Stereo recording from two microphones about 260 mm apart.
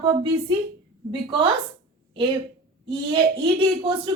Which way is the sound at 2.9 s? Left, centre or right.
Centre.